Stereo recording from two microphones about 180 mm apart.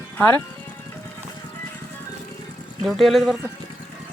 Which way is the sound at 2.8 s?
Centre (ahead or behind).